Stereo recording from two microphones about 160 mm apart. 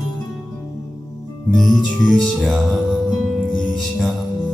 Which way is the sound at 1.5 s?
Centre (ahead or behind).